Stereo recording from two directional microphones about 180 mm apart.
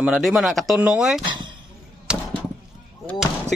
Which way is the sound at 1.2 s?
25° right (ahead or behind).